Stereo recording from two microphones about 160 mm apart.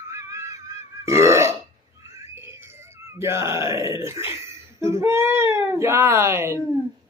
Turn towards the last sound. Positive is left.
turn(degrees=-15)  # may be behind; listen again after turning